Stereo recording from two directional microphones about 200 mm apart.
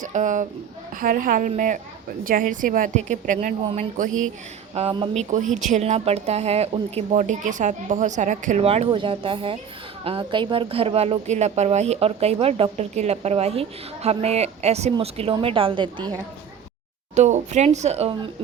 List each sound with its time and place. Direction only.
0.0 s a woman's voice: 40° right (ahead or behind)
4.7 s a woman's voice: 30° right (ahead or behind)
17.2 s a woman's voice: 35° right (ahead or behind)